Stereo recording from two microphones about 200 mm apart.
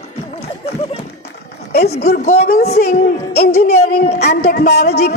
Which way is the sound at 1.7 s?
50° left (ahead or behind).